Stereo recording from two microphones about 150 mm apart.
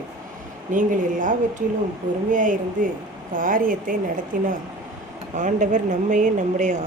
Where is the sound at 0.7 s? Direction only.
60° right (ahead or behind).